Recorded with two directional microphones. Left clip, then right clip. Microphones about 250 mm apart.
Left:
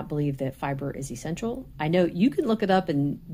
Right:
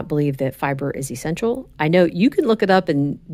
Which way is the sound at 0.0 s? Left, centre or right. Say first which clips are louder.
Right 8 dB; right.